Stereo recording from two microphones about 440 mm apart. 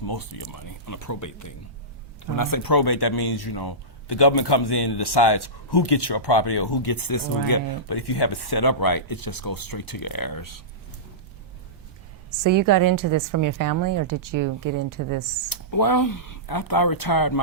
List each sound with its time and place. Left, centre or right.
0.0 s speech: left
12.4 s a woman's voice: right
15.4 s speech: left